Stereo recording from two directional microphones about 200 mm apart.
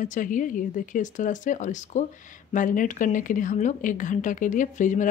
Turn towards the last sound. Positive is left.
turn(degrees=40)  # may be behind; listen again after turning